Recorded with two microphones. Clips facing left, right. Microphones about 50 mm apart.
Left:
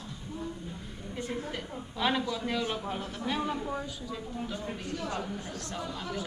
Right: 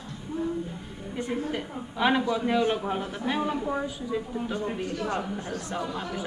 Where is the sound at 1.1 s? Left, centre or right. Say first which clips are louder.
Right 6 dB; centre.